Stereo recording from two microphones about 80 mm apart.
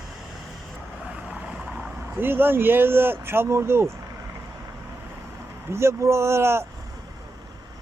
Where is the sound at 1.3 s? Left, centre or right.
Centre.